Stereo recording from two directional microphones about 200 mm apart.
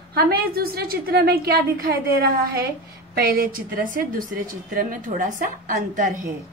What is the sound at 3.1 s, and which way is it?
A woman's voice, 50° right (ahead or behind).